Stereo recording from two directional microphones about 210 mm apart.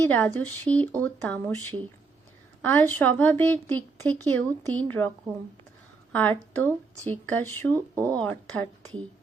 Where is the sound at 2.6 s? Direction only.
10° left (ahead or behind).